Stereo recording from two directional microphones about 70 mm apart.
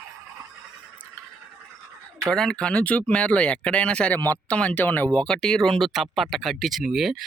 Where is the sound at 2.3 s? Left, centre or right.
Centre; by 5.2 s left.